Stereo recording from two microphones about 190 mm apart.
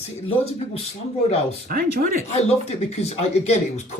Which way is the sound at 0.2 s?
30° left (ahead or behind).